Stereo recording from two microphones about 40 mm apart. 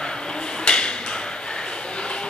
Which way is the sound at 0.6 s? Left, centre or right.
Centre.